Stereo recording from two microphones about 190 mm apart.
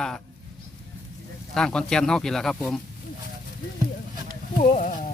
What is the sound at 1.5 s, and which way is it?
Speech, 5° left (ahead or behind).